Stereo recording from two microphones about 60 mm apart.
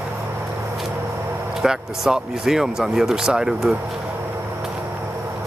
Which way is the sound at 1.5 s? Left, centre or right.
Centre.